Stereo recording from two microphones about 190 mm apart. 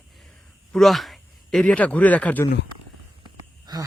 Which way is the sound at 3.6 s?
20° right (ahead or behind).